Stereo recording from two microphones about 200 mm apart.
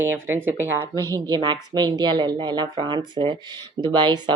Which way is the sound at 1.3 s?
20° right (ahead or behind).